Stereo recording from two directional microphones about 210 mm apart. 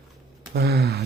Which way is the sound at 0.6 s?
50° right (ahead or behind).